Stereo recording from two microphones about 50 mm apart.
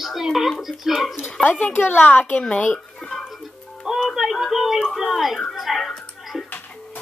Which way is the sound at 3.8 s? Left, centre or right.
Centre.